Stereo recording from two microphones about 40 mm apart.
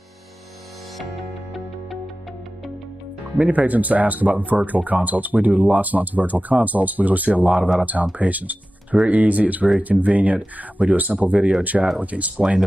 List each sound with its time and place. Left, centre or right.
3.3 s speech: right